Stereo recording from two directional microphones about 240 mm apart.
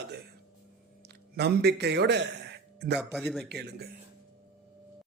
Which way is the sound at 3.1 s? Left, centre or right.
Centre.